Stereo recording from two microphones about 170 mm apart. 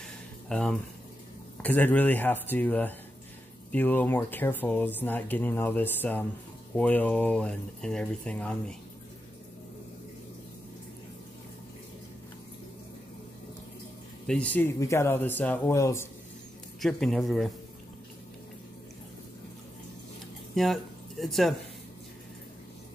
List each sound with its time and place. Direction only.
0.0 s a sound: 5° left (ahead or behind)
1.6 s speech: 10° left (ahead or behind)
14.2 s speech: 5° left (ahead or behind)
16.8 s speech: centre (ahead or behind)
20.5 s speech: centre (ahead or behind)